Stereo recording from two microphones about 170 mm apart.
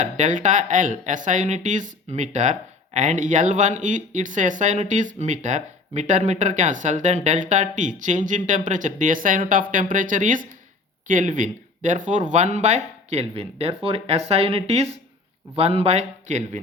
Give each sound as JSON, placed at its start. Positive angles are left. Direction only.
{"t": 0.0, "sound": "speech", "side_deg": -45}